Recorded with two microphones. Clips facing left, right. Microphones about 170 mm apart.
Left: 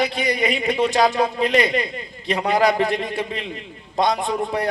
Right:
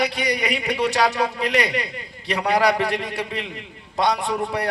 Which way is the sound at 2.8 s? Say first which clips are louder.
Left 2 dB; 75° right (ahead or behind).